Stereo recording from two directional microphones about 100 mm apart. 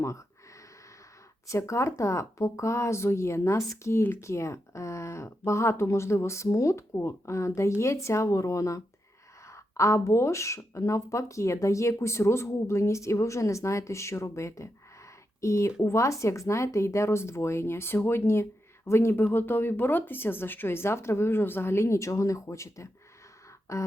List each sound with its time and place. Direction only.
1.5 s speech: 30° left (ahead or behind)